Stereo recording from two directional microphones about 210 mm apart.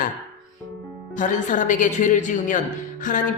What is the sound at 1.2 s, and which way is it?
A woman's voice, 35° left (ahead or behind).